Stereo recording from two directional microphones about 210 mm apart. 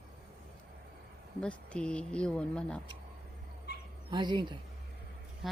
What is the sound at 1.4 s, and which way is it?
Speech, 5° left (ahead or behind).